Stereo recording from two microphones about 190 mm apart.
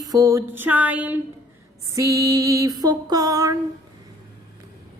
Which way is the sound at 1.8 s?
15° right (ahead or behind).